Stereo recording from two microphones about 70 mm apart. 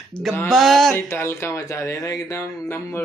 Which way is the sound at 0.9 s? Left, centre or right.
Left.